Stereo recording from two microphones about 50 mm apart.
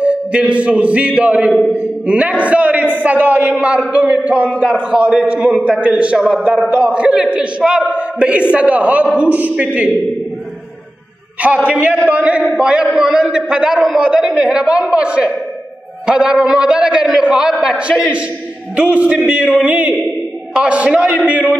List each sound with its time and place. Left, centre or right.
0.0 s a man's voice: right
1.5 s speech: centre
2.0 s a man's voice: right
3.5 s a man's voice: right
6.1 s a man's voice: centre
11.4 s a man's voice: right